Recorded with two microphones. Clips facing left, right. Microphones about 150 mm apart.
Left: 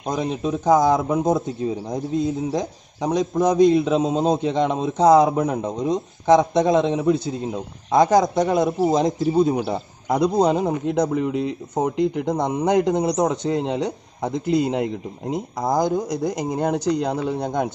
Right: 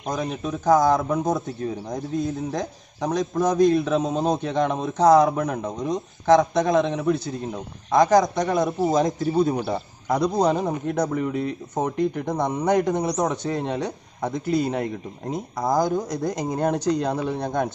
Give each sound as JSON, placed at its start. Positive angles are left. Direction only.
{"t": 0.1, "sound": "a man's voice", "side_deg": 25}